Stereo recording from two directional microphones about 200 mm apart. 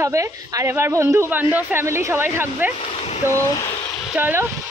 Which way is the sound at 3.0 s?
35° left (ahead or behind).